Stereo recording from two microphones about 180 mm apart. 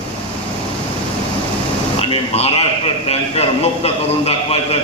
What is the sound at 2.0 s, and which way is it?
A man's voice, 30° left (ahead or behind).